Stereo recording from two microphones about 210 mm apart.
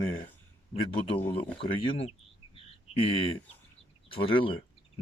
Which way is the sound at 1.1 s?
10° left (ahead or behind).